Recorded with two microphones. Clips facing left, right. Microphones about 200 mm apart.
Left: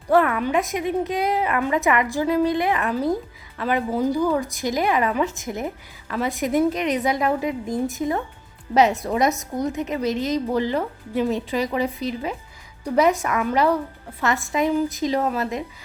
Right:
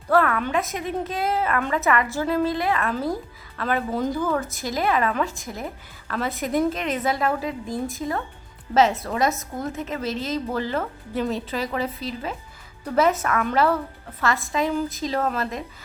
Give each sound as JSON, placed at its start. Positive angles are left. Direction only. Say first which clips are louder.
{"t": 0.1, "sound": "speech", "louder": "left 2 dB", "side_deg": 15}